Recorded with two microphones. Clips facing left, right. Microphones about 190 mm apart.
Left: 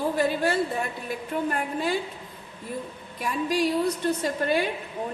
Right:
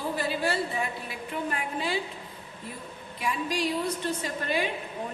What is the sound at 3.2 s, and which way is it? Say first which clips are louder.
A woman's voice: left 4 dB; 45° left (ahead or behind).